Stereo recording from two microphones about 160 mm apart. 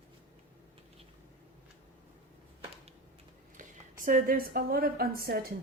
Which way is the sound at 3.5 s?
55° right (ahead or behind).